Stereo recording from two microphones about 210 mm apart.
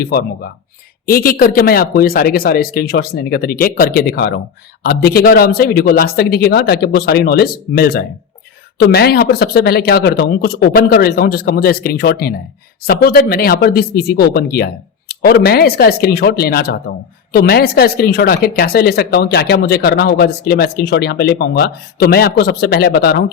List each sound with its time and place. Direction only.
0.0 s speech: 45° left (ahead or behind)